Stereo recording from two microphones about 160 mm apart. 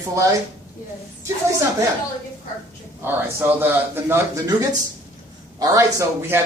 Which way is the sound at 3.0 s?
15° right (ahead or behind).